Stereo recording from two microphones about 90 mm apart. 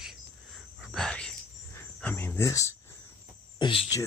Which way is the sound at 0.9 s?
10° left (ahead or behind).